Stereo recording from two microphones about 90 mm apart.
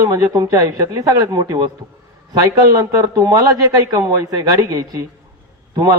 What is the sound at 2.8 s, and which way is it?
A man's voice, 35° right (ahead or behind).